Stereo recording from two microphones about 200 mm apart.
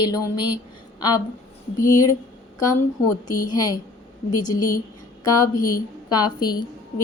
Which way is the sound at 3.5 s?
20° left (ahead or behind).